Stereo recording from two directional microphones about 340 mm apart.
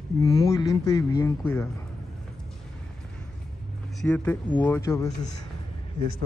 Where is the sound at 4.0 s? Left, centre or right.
Centre.